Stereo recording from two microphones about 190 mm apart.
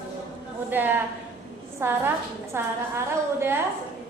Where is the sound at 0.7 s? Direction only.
10° right (ahead or behind).